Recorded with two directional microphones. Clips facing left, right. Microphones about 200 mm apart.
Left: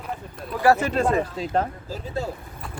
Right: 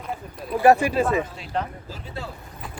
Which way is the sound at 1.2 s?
45° left (ahead or behind).